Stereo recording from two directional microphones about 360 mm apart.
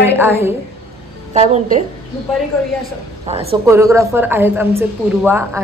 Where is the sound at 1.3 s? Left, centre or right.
Centre.